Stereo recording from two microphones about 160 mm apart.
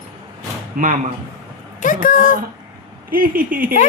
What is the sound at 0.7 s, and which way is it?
Speech, 60° right (ahead or behind).